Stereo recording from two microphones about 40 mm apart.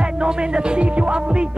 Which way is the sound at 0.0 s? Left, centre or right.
Right.